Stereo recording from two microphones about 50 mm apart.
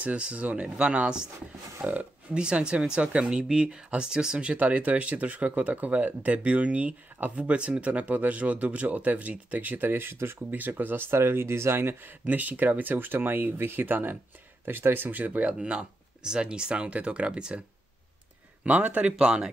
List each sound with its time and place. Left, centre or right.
0.0 s speech: right
1.8 s speech: right
2.3 s speech: centre; by 12.0 s right
12.3 s speech: right
15.6 s speech: centre
18.6 s speech: right